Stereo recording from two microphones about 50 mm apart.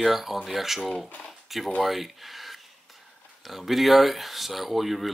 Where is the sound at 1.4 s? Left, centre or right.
Centre.